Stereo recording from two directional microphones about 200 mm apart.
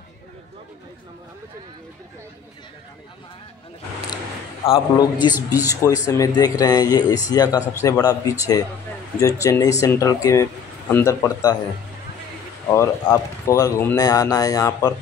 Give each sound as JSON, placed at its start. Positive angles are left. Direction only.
{"t": 4.6, "sound": "speech", "side_deg": 25}
{"t": 5.3, "sound": "a man's voice", "side_deg": -10}
{"t": 6.0, "sound": "speech", "side_deg": 15}
{"t": 12.7, "sound": "speech", "side_deg": 15}